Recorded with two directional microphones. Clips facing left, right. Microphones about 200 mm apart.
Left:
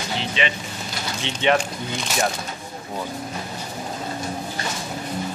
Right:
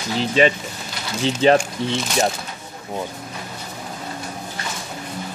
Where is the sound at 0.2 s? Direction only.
40° right (ahead or behind).